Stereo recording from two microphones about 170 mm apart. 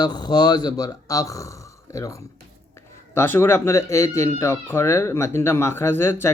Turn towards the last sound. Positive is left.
turn(degrees=15)  # may be behind; listen again after turning